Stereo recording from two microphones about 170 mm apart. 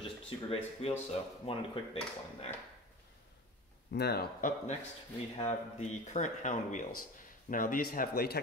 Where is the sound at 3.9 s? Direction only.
70° left (ahead or behind).